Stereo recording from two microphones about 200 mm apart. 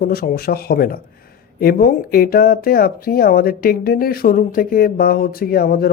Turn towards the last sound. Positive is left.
turn(degrees=50)  # may be behind; listen again after turning